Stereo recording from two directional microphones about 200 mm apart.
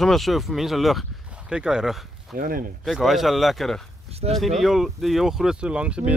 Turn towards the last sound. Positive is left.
turn(degrees=-5)  # may be behind; listen again after turning